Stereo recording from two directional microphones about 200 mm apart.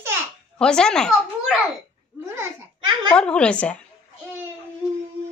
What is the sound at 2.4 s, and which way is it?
Babbling, 20° right (ahead or behind).